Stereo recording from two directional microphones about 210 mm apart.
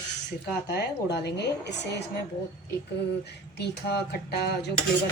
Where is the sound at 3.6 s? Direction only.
50° left (ahead or behind).